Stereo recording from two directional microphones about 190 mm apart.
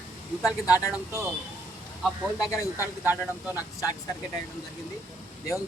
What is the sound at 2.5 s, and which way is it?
Speech, 15° left (ahead or behind).